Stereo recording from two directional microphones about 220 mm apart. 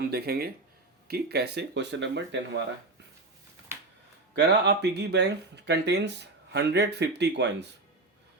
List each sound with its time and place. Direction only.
0.1 s speech: 45° right (ahead or behind)
4.4 s speech: 50° right (ahead or behind)